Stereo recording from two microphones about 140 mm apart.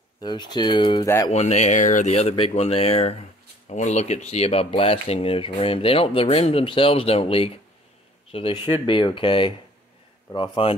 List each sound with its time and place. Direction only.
0.2 s speech: 30° left (ahead or behind)
1.0 s speech: 20° left (ahead or behind)
1.3 s speech: 50° left (ahead or behind); by 10.7 s 35° left (ahead or behind)